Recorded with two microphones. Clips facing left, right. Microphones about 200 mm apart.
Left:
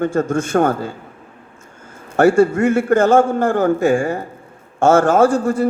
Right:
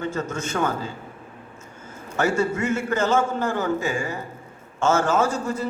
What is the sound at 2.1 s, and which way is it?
A man's voice, 55° left (ahead or behind).